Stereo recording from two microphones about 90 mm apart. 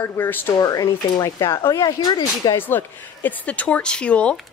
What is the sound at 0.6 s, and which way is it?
Speech, 40° left (ahead or behind).